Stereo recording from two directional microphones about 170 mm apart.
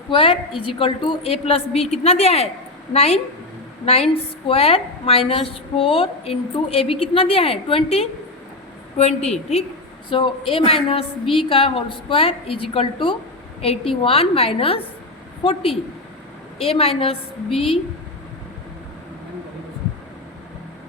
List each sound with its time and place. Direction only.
0.1 s a woman's voice: 30° left (ahead or behind)